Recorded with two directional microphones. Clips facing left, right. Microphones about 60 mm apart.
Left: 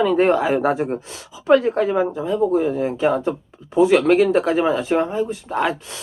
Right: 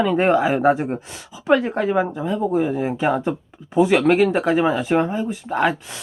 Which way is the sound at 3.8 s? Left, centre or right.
Right.